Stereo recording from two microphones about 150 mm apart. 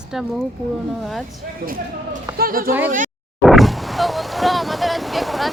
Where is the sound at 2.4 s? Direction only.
70° right (ahead or behind).